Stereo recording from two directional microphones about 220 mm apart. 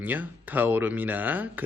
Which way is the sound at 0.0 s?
10° right (ahead or behind).